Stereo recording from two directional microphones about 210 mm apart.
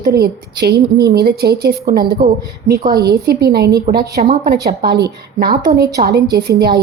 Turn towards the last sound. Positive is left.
turn(degrees=-50)  # may be behind; listen again after turning